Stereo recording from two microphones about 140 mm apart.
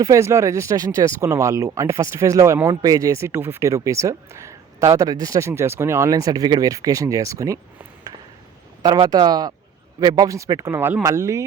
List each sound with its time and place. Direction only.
0.0 s speech: 20° right (ahead or behind)